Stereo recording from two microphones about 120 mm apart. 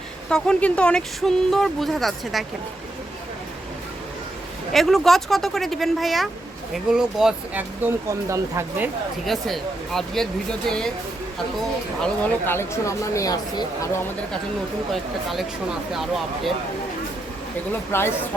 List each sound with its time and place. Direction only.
0.3 s speech: 5° left (ahead or behind)
4.7 s speech: centre (ahead or behind)
7.8 s speech: 25° right (ahead or behind)
9.2 s speech: centre (ahead or behind)
12.0 s speech: 15° left (ahead or behind); by 13.9 s 30° left (ahead or behind)
14.9 s speech: centre (ahead or behind)
17.7 s speech: 20° left (ahead or behind)